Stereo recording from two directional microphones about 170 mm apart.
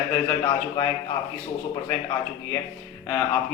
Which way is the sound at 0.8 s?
25° left (ahead or behind).